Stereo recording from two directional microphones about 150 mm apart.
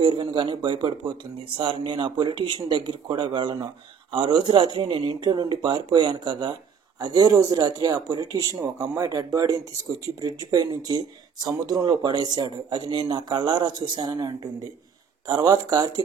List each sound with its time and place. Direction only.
0.0 s speech: 30° right (ahead or behind)